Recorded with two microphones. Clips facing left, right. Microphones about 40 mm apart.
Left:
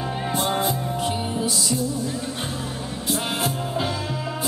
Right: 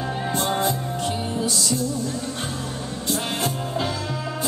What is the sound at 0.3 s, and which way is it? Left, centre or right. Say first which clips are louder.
Music: even; centre.